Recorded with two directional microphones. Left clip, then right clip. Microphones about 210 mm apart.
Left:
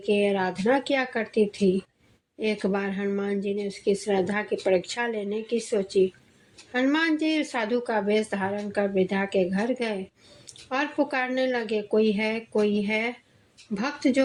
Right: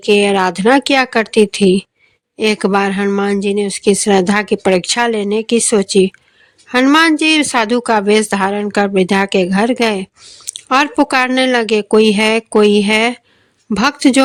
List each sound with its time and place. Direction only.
0.0 s speech: 45° right (ahead or behind)